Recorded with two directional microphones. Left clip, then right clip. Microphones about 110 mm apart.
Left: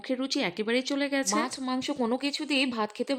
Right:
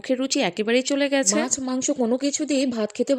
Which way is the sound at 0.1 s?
35° right (ahead or behind).